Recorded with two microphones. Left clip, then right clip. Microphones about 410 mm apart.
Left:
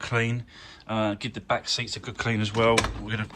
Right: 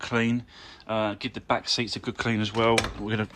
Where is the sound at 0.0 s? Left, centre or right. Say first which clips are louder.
Right 1 dB; centre.